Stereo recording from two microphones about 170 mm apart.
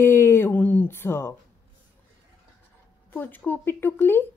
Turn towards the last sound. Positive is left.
turn(degrees=15)  # may be behind; listen again after turning